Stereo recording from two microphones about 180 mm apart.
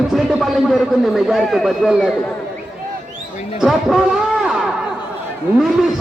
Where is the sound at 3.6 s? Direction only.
Centre (ahead or behind).